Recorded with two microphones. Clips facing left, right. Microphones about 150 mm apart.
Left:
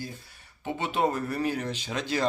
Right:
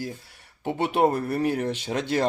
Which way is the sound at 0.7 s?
60° right (ahead or behind).